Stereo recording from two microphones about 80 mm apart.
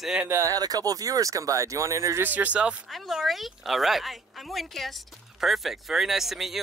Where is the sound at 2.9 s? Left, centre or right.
Centre.